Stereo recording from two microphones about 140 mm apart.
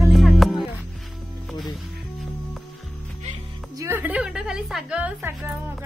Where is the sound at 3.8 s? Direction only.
15° right (ahead or behind).